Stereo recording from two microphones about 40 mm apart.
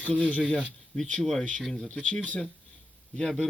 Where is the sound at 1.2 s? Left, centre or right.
Centre.